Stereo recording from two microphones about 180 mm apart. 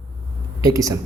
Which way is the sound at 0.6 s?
20° right (ahead or behind).